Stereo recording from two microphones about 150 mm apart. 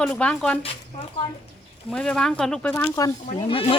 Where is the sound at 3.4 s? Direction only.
35° left (ahead or behind).